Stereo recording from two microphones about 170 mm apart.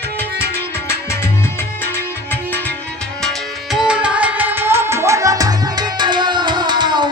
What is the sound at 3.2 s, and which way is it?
Music, centre (ahead or behind).